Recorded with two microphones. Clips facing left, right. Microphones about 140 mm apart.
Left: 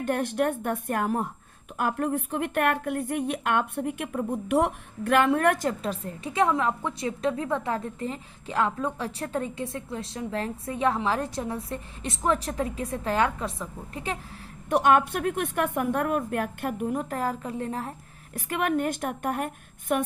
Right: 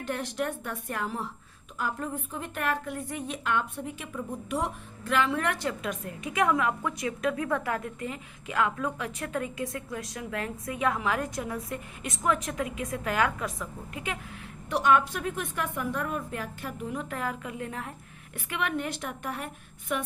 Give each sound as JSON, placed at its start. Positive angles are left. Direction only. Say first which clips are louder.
{"t": 0.0, "sound": "a woman's voice", "louder": "left 6 dB", "side_deg": 55}
{"t": 1.8, "sound": "a woman's voice", "louder": "left 6 dB", "side_deg": 60}
{"t": 14.7, "sound": "a woman's voice", "louder": "left 3 dB", "side_deg": 50}